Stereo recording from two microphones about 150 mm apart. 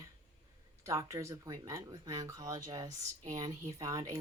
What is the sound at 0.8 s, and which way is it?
Speech, 20° right (ahead or behind).